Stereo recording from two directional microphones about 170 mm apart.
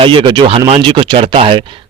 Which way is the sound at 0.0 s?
30° right (ahead or behind).